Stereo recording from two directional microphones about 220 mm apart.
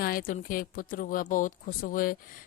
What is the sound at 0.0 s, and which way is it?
Speech, 40° left (ahead or behind).